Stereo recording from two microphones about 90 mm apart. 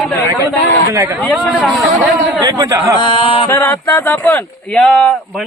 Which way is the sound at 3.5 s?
30° left (ahead or behind).